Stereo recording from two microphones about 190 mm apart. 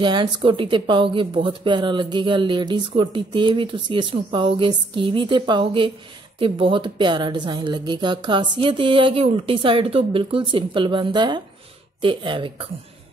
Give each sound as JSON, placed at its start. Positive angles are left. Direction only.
{"t": 0.0, "sound": "speech", "side_deg": -25}